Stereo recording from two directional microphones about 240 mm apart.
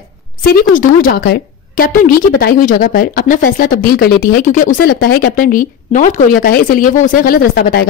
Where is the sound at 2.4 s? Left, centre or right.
Left.